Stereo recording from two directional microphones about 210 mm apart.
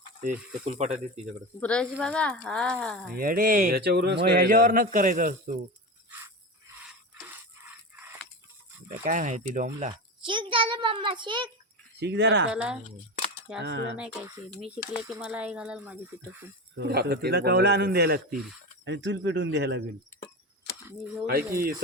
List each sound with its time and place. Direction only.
0.6 s speech: 35° right (ahead or behind)
1.5 s speech: 5° left (ahead or behind)
3.2 s speech: 45° right (ahead or behind)
6.1 s a sound: 10° right (ahead or behind)
9.0 s speech: 40° right (ahead or behind)
9.9 s a child's voice: 25° right (ahead or behind)
11.9 s speech: 55° right (ahead or behind)
12.5 s speech: 5° right (ahead or behind)
13.6 s speech: 55° right (ahead or behind)
13.9 s speech: 5° right (ahead or behind)
16.7 s speech: 50° right (ahead or behind)
18.9 s speech: 60° right (ahead or behind)